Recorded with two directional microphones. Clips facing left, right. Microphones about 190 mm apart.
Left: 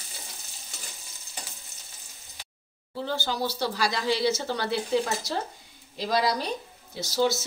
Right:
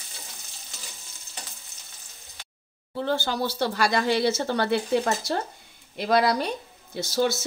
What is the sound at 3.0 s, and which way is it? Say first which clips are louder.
Speech: right 3 dB; 55° right (ahead or behind).